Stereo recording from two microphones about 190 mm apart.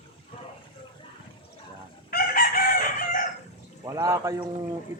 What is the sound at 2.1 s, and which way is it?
Chicken, 50° left (ahead or behind).